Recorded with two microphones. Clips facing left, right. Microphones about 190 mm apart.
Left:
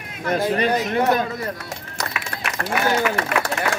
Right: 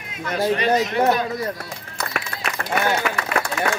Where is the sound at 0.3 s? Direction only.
45° left (ahead or behind).